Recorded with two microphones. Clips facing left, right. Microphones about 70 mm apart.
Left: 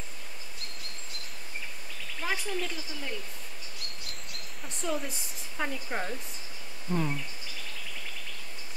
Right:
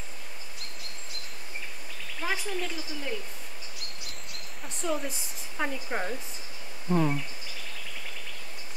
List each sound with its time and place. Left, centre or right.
2.2 s speech: centre
4.3 s speech: centre
6.9 s speech: centre